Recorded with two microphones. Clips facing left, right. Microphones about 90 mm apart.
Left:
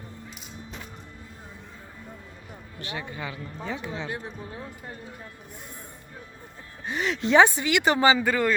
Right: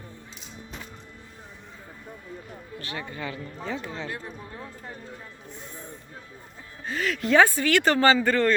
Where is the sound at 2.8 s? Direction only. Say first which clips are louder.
Left 1 dB; 20° left (ahead or behind).